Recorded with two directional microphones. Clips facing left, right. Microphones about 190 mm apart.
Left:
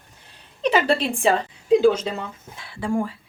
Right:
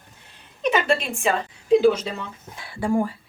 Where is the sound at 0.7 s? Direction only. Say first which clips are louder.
Left 2 dB; 35° left (ahead or behind).